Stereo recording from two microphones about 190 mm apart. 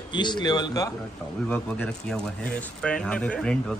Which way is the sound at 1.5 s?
5° left (ahead or behind).